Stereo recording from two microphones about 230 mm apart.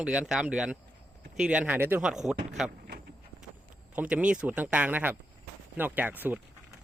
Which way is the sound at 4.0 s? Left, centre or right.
Centre.